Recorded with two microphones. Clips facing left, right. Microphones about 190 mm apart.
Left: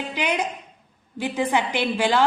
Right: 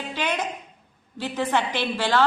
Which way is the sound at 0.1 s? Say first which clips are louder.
Left 1 dB; 15° left (ahead or behind).